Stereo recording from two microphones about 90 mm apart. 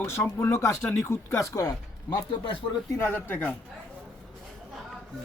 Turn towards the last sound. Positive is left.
turn(degrees=20)  # may be behind; listen again after turning